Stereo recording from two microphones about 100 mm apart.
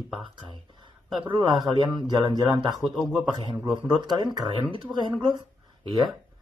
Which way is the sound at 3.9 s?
45° right (ahead or behind).